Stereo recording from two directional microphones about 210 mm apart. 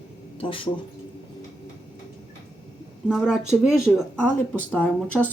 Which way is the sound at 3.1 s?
Centre (ahead or behind).